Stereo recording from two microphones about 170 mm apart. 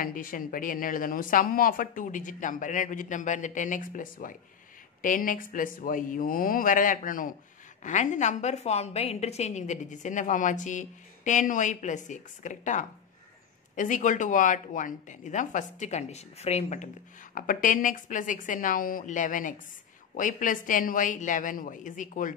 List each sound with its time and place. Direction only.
0.0 s speech: 55° left (ahead or behind)